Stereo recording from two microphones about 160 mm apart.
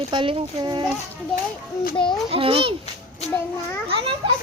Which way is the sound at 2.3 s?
35° right (ahead or behind).